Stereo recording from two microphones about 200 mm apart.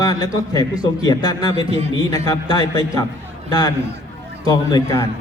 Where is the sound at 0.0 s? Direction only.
20° left (ahead or behind).